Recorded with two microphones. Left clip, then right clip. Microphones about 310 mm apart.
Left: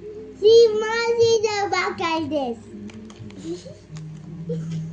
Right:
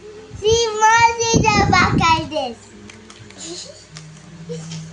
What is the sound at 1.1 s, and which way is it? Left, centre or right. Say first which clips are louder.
A child's voice: right 2 dB; centre.